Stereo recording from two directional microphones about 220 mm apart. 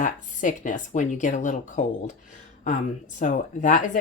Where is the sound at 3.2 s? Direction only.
35° left (ahead or behind).